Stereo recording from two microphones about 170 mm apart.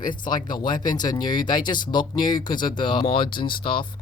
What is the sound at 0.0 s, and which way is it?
Speech, 25° left (ahead or behind).